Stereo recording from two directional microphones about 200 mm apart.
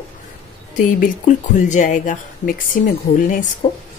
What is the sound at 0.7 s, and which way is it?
Speech, 40° left (ahead or behind).